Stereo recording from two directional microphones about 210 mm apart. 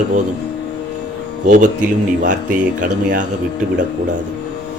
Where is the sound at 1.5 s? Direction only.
35° right (ahead or behind).